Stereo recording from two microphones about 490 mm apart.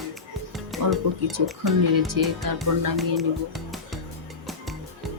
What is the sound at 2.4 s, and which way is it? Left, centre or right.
Speech, right.